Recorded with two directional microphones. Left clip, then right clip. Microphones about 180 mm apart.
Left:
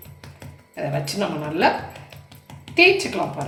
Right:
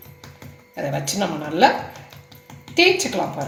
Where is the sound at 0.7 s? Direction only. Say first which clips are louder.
Right 1 dB; 30° right (ahead or behind).